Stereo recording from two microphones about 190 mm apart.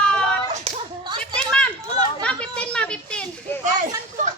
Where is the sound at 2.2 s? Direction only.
5° left (ahead or behind).